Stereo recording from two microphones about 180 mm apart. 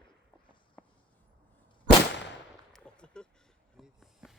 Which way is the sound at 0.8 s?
10° left (ahead or behind).